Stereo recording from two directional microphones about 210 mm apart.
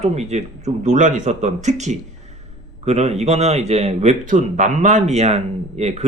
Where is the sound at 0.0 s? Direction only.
30° right (ahead or behind).